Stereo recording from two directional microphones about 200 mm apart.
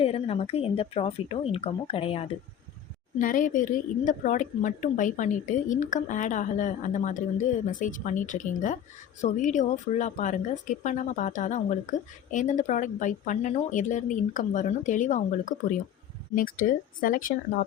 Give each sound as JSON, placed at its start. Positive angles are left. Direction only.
{"t": 0.0, "sound": "speech", "side_deg": 30}
{"t": 3.2, "sound": "speech", "side_deg": 40}